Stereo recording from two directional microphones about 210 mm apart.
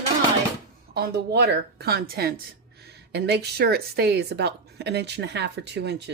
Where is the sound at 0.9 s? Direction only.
50° right (ahead or behind).